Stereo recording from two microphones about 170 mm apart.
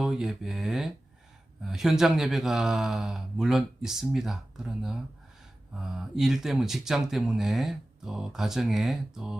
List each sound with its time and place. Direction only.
0.0 s speech: centre (ahead or behind)